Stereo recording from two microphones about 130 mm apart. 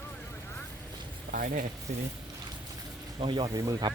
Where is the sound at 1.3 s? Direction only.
90° right.